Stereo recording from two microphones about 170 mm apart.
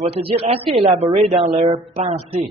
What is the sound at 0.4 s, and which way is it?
A man's voice, 35° right (ahead or behind).